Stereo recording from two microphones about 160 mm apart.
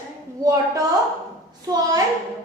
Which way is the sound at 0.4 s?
20° right (ahead or behind).